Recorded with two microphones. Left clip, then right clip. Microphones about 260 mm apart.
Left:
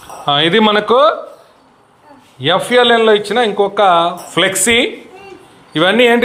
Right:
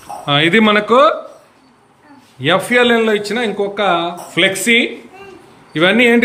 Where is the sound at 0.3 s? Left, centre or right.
Centre.